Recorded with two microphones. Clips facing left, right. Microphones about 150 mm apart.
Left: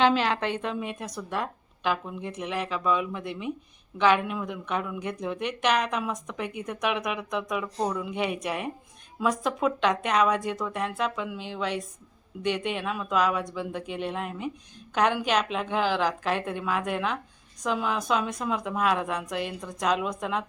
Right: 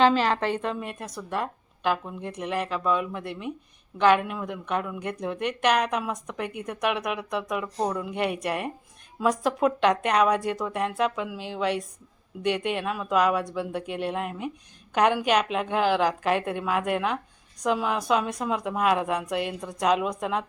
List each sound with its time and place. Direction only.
0.0 s a woman's voice: centre (ahead or behind)